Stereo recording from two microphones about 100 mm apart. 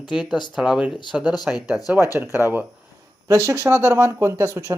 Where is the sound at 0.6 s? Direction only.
5° right (ahead or behind).